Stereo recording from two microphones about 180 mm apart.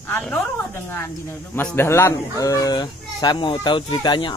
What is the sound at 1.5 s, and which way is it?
Speech, 10° left (ahead or behind).